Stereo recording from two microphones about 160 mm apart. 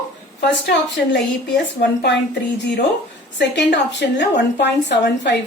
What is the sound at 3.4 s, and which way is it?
A woman's voice, 90° left.